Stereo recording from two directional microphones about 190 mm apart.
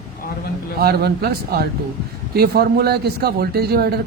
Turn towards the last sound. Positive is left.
turn(degrees=-55)  # may be behind; listen again after turning